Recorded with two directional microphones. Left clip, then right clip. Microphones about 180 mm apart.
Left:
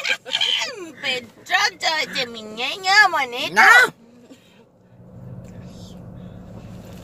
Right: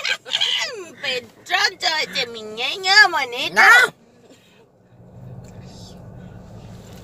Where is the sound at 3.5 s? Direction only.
5° left (ahead or behind).